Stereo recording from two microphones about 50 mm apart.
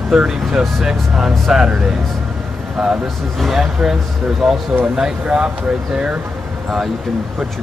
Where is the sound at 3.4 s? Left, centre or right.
Centre.